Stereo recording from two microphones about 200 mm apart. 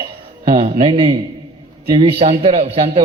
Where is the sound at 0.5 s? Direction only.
30° right (ahead or behind).